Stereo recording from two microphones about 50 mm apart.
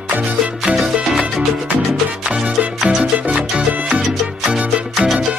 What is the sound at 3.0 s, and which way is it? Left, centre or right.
Salsa music, right.